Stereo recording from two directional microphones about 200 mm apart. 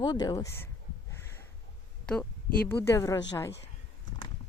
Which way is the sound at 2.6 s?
10° left (ahead or behind).